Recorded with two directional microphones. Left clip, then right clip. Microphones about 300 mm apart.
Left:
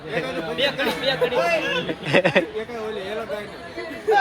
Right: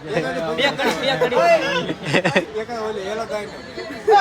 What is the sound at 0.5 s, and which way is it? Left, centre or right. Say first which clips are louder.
Speech: right 2 dB; right.